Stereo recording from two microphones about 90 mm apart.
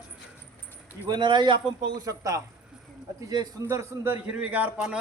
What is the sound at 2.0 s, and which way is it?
Speech, 40° right (ahead or behind).